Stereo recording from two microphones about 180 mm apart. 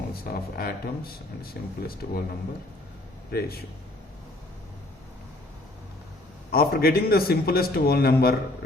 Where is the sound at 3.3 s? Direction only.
60° left (ahead or behind).